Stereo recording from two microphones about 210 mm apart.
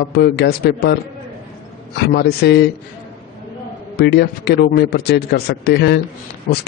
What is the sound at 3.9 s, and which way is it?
A man's voice, 50° left (ahead or behind).